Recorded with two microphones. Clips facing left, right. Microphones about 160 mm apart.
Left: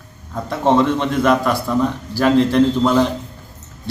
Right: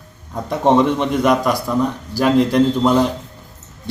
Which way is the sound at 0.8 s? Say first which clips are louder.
Even; 15° right (ahead or behind).